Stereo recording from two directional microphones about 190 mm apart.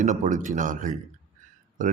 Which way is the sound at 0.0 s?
40° right (ahead or behind).